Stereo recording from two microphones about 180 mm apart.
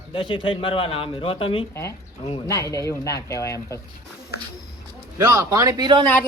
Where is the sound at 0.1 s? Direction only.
25° left (ahead or behind).